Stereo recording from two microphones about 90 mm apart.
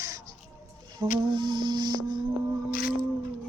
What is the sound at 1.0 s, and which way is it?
Music, 60° right (ahead or behind).